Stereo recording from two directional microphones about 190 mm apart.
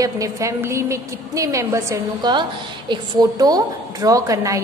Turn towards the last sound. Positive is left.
turn(degrees=-15)  # may be behind; listen again after turning